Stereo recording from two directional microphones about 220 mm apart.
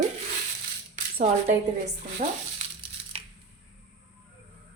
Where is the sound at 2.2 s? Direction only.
35° right (ahead or behind).